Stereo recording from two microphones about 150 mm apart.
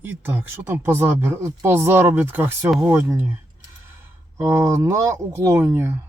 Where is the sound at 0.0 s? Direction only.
15° right (ahead or behind).